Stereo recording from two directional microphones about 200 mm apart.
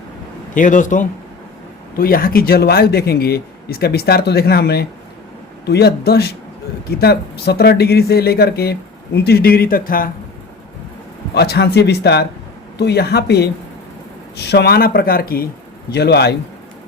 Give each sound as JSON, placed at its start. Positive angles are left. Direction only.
{"t": 0.5, "sound": "speech", "side_deg": 40}
{"t": 11.3, "sound": "speech", "side_deg": 55}